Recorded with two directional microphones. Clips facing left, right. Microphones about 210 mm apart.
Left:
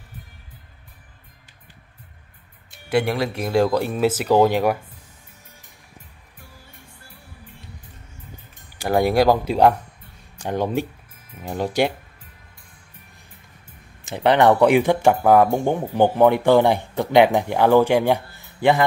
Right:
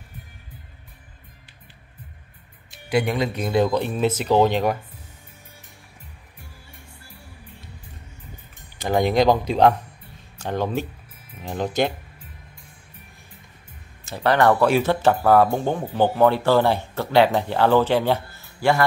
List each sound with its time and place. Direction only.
3.1 s speech: 5° left (ahead or behind)
8.7 s speech: 10° left (ahead or behind)
14.0 s speech: 20° left (ahead or behind)